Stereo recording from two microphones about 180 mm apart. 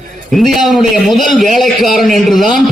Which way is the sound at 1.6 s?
Centre (ahead or behind).